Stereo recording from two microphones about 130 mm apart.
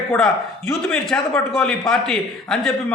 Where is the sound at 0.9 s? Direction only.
5° left (ahead or behind).